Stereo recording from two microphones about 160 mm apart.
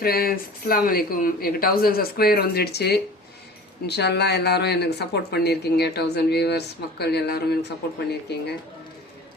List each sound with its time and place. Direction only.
0.0 s speech: 70° left (ahead or behind); by 8.4 s 90° left